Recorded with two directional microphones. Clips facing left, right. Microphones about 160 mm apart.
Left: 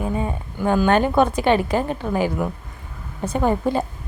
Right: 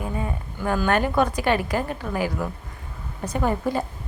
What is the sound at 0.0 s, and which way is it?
A woman's voice, 25° left (ahead or behind).